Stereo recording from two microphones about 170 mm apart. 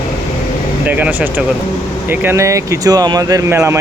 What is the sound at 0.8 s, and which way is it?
Speech, 10° right (ahead or behind).